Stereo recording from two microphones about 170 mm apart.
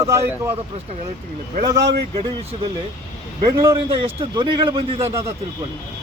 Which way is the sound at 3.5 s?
25° right (ahead or behind).